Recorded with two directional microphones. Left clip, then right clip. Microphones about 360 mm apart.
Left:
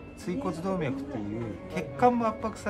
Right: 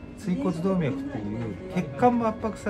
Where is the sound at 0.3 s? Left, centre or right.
Centre.